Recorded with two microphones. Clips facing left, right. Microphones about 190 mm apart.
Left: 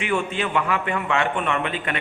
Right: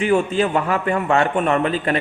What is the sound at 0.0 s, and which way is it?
A man's voice, 40° right (ahead or behind).